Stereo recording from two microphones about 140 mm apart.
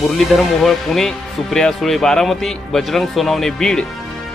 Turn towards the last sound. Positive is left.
turn(degrees=5)  # may be behind; listen again after turning